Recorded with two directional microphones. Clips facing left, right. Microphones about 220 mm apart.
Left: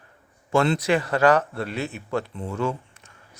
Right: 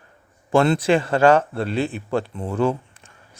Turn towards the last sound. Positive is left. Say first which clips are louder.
# right 1 dB
turn(degrees=-30)  # may be behind; listen again after turning